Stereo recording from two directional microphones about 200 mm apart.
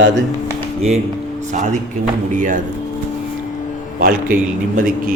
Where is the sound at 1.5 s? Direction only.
35° right (ahead or behind).